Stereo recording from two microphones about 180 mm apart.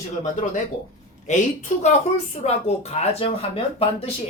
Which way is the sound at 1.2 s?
40° left (ahead or behind).